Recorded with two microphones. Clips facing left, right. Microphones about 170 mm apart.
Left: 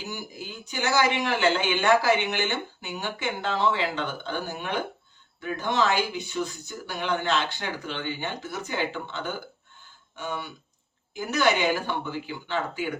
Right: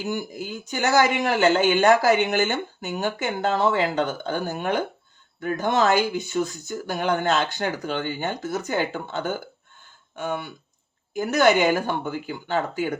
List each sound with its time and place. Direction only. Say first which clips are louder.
0.0 s speech: right 8 dB; 50° right (ahead or behind)